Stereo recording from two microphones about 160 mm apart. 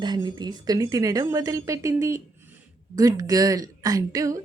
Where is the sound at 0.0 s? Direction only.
25° right (ahead or behind).